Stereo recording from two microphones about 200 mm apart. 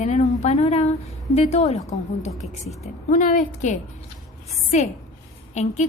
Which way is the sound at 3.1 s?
40° left (ahead or behind).